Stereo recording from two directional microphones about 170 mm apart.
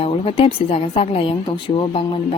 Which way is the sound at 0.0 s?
35° left (ahead or behind).